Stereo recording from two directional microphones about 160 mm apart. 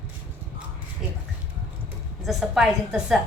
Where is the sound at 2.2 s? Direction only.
Centre (ahead or behind).